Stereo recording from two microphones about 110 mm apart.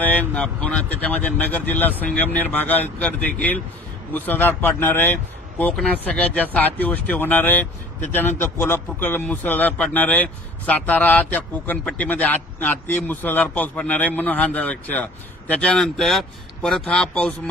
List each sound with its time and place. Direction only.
0.0 s a man's voice: 15° left (ahead or behind)